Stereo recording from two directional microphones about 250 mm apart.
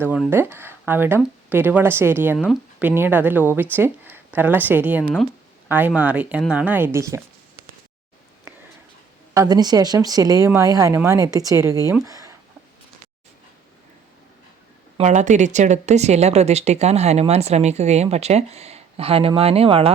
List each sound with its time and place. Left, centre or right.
0.0 s speech: centre
9.3 s speech: centre
12.0 s a sound: centre
14.9 s a woman's voice: right